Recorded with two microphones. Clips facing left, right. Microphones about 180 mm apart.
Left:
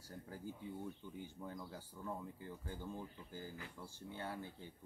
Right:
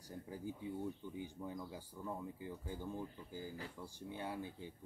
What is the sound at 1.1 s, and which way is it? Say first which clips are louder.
Speech: right 3 dB; 15° right (ahead or behind).